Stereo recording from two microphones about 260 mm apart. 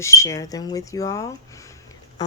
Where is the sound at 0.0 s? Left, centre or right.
Centre.